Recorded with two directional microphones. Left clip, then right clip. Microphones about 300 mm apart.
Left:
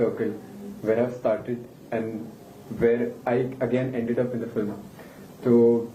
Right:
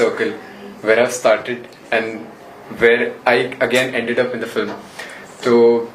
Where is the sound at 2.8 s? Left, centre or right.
Centre.